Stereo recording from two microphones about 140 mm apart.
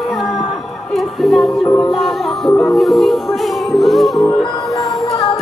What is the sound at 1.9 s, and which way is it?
Music, centre (ahead or behind).